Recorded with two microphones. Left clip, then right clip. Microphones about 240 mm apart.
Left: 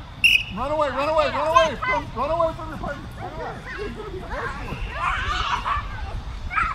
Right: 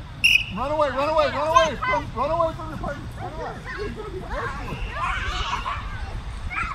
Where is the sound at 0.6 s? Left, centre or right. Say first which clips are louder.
Even; centre.